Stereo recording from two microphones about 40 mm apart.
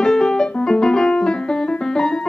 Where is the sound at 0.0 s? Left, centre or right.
Centre.